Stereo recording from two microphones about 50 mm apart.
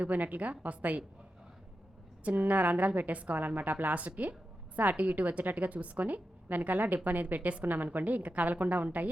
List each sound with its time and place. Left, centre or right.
0.0 s a woman's voice: right
2.2 s a woman's voice: right